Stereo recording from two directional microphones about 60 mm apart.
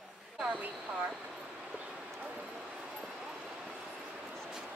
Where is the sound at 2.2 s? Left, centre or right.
Right.